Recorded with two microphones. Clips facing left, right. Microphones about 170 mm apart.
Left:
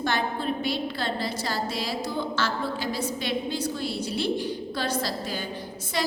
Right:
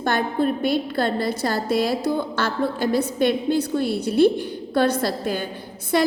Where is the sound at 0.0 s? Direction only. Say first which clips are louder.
Right 6 dB; 55° right (ahead or behind).